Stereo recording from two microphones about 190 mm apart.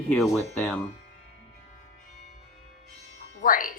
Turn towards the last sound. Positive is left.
turn(degrees=45)  # may be behind; listen again after turning